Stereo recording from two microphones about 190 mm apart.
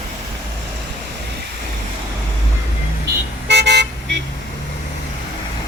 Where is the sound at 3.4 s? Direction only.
65° right (ahead or behind).